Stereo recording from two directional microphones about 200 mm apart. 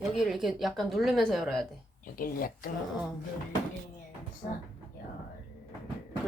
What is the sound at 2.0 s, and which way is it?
Speech, 45° left (ahead or behind).